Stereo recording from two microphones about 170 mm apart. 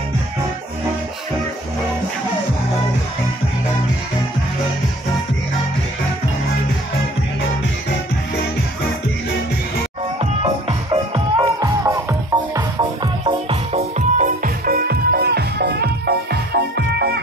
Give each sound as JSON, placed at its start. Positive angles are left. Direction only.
{"t": 10.4, "sound": "music", "side_deg": -35}
{"t": 11.6, "sound": "music", "side_deg": -20}
{"t": 13.2, "sound": "music", "side_deg": -35}